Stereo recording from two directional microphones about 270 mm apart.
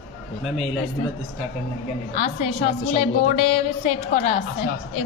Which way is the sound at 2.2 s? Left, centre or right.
Left.